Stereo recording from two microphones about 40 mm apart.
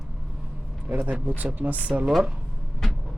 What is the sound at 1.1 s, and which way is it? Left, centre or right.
Speech, right.